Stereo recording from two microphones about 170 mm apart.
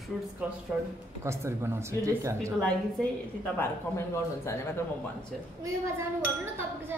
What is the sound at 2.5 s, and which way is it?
Speech, 5° left (ahead or behind).